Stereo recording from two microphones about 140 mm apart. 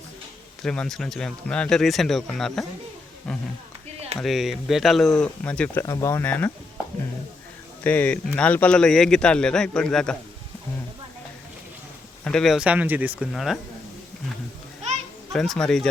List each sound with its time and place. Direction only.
0.6 s speech: 5° left (ahead or behind)
5.8 s speech: 25° left (ahead or behind)
7.9 s speech: 10° left (ahead or behind)
12.2 s speech: 5° left (ahead or behind)
15.3 s speech: 5° left (ahead or behind)